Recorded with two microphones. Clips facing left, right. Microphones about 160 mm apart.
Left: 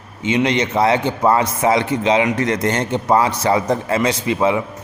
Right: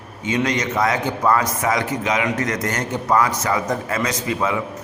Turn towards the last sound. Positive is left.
turn(degrees=25)  # may be behind; listen again after turning